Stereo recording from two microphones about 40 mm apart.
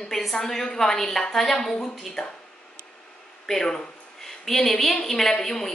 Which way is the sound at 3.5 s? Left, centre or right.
Centre.